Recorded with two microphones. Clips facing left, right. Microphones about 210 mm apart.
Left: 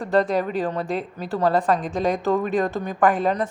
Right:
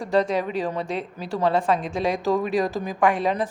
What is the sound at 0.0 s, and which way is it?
A woman's voice, centre (ahead or behind).